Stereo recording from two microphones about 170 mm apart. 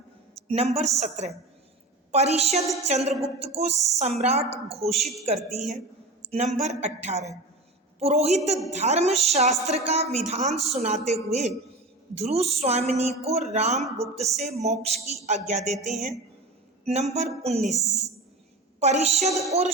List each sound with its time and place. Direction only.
0.3 s speech: 35° right (ahead or behind)
4.9 s a woman's voice: centre (ahead or behind)
5.2 s speech: 40° right (ahead or behind)
6.2 s a sound: 40° right (ahead or behind)
6.6 s speech: 40° right (ahead or behind)
16.8 s music: 40° right (ahead or behind)
17.4 s speech: 40° right (ahead or behind)
18.8 s speech: 40° right (ahead or behind)
19.3 s a sound: 20° right (ahead or behind)